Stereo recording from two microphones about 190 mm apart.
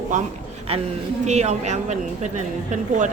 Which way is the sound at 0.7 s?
30° right (ahead or behind).